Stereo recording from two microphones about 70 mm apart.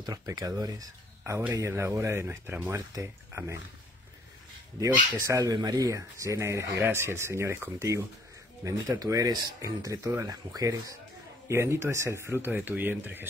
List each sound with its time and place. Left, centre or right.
0.0 s speech: right
1.7 s speech: right
4.7 s speech: right
5.5 s speech: right
8.6 s speech: right
11.4 s speech: right